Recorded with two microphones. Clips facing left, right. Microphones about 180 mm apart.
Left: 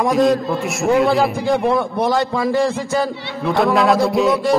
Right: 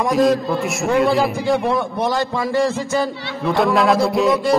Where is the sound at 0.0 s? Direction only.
Centre (ahead or behind).